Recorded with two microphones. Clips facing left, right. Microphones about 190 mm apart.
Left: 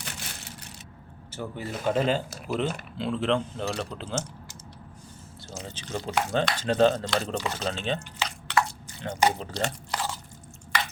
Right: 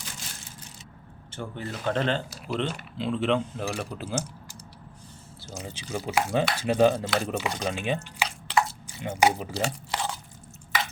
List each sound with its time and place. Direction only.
0.0 s a sound: 65° left (ahead or behind)
1.3 s speech: 10° left (ahead or behind); by 4.3 s 10° right (ahead or behind)
5.4 s speech: 10° right (ahead or behind)